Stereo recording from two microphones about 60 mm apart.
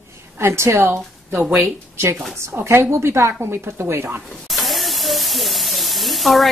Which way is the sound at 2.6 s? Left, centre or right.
Right.